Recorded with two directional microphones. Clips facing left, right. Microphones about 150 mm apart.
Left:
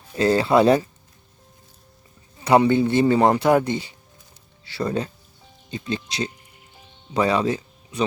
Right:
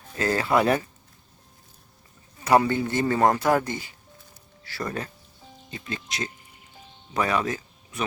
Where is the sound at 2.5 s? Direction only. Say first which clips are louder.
Left 4 dB; 20° left (ahead or behind).